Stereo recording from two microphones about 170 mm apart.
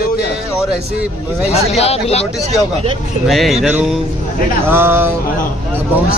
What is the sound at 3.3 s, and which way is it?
Speech, centre (ahead or behind).